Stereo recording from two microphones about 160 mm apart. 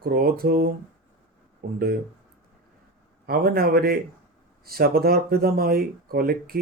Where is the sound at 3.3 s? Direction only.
70° right (ahead or behind).